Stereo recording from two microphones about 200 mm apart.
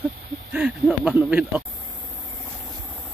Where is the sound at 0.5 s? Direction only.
5° right (ahead or behind).